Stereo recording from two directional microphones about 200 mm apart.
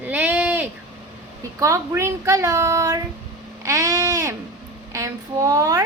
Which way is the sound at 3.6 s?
15° right (ahead or behind).